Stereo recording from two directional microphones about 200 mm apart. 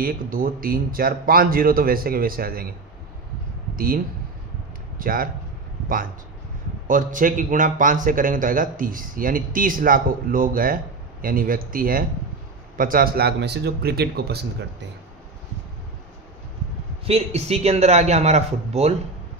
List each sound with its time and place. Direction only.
0.0 s a man's voice: 45° right (ahead or behind)
3.7 s speech: 45° right (ahead or behind)
6.9 s a man's voice: 40° right (ahead or behind)
17.0 s a man's voice: 30° right (ahead or behind)